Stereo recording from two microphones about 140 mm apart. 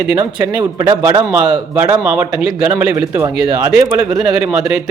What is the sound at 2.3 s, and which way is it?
Speech, 5° right (ahead or behind).